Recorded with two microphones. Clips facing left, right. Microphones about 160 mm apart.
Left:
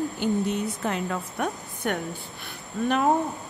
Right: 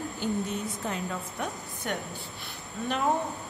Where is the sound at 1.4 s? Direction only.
55° left (ahead or behind).